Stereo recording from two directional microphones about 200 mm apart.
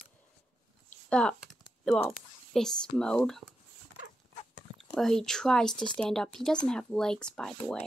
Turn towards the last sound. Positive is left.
turn(degrees=5)  # may be behind; listen again after turning